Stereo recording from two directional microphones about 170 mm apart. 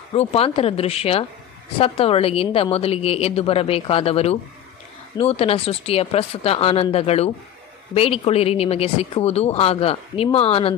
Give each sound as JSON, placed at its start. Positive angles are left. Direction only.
{"t": 0.1, "sound": "a woman's voice", "side_deg": 35}